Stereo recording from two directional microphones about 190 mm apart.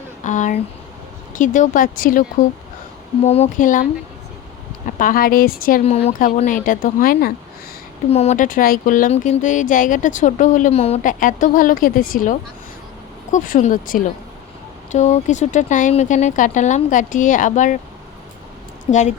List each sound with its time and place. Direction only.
0.3 s speech: 40° left (ahead or behind)
3.2 s speech: 35° left (ahead or behind)
4.9 s speech: 45° left (ahead or behind)
5.8 s speech: 35° left (ahead or behind); by 7.3 s 50° left (ahead or behind)
8.1 s speech: 35° left (ahead or behind)
18.9 s speech: 40° left (ahead or behind)